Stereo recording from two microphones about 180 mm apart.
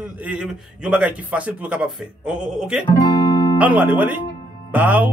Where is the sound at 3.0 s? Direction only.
20° left (ahead or behind).